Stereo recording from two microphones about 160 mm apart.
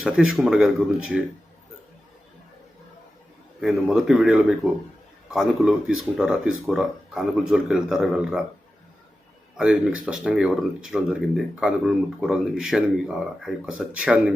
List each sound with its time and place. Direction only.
0.0 s speech: 5° right (ahead or behind)
3.6 s speech: centre (ahead or behind)
9.6 s speech: 5° right (ahead or behind)